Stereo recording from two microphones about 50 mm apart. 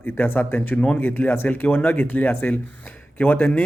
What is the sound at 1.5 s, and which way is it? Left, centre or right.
Speech, left.